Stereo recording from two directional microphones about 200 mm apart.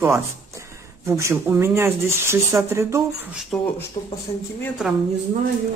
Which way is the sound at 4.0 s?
25° left (ahead or behind).